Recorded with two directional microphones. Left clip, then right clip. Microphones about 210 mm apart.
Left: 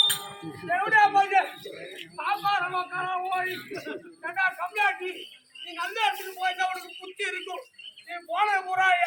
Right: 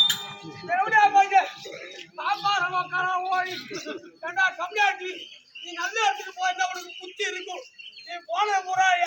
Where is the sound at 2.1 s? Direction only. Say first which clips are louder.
Right 1 dB; 10° right (ahead or behind).